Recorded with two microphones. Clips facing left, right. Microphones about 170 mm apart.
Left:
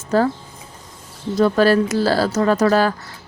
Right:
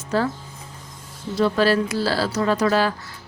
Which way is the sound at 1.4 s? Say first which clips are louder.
Left 4 dB; 45° left (ahead or behind).